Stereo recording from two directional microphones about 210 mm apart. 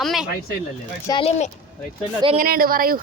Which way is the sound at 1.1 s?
25° left (ahead or behind).